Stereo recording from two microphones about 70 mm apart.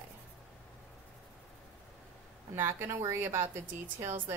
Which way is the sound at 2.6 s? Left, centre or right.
Right.